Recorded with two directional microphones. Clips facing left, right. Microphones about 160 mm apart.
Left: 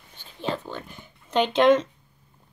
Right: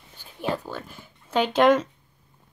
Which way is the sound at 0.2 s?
10° right (ahead or behind).